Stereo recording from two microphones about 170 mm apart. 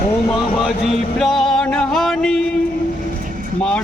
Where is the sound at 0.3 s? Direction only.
Centre (ahead or behind).